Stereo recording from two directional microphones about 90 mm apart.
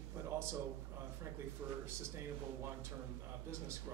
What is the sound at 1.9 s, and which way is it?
Speech, 30° right (ahead or behind).